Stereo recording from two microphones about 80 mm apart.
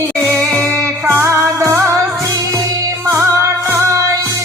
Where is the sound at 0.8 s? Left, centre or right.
Right.